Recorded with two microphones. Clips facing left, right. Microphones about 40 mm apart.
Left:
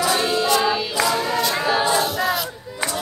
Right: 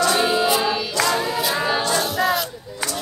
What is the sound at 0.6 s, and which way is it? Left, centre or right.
Choir, centre.